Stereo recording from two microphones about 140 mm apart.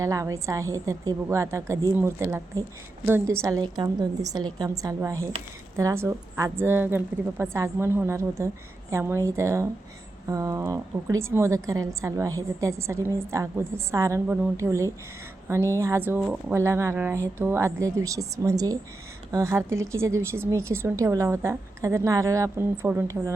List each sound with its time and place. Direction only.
0.0 s a woman's voice: 25° right (ahead or behind)